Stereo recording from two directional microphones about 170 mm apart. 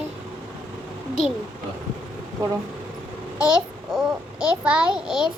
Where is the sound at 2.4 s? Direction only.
20° right (ahead or behind).